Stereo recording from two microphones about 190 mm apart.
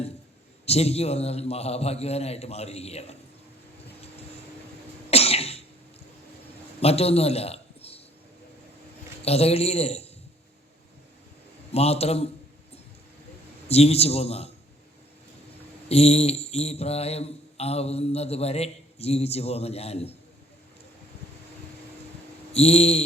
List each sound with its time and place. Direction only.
0.6 s mantra: 35° left (ahead or behind)
5.1 s cough: 30° left (ahead or behind)
6.7 s a sound: 30° left (ahead or behind)
9.2 s mantra: 35° left (ahead or behind)
11.7 s mantra: 35° left (ahead or behind)
13.7 s mantra: 35° left (ahead or behind)
15.9 s mantra: 35° left (ahead or behind)
22.5 s mantra: 35° left (ahead or behind)